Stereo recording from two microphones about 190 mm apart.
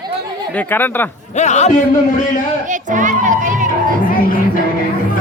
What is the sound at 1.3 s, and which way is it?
Speech, 35° left (ahead or behind).